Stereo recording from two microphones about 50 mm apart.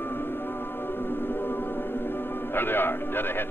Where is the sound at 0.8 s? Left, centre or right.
Left.